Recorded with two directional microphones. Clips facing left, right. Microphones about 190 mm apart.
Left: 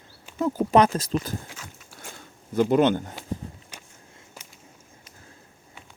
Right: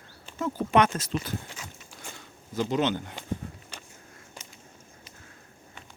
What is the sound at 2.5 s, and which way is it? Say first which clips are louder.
Speech: left 7 dB; 55° left (ahead or behind).